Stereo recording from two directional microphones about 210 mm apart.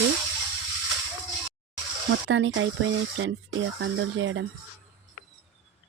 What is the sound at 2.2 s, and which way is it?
Speech, 60° right (ahead or behind).